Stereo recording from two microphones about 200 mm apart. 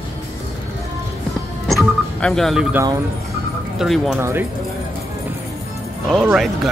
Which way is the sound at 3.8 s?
Centre (ahead or behind).